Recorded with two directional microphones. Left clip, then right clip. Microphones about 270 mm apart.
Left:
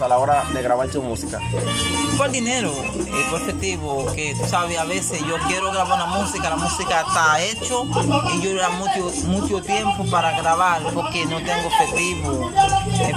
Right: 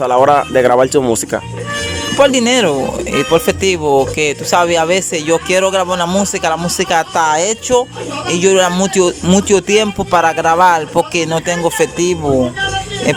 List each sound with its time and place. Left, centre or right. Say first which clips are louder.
0.1 s speech: right 8 dB; right